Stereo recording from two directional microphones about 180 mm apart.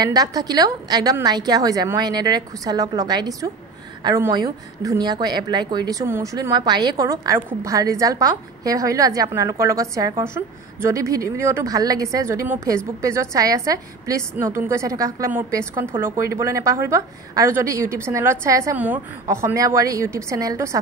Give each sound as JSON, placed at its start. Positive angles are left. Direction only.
{"t": 0.0, "sound": "a woman's voice", "side_deg": -20}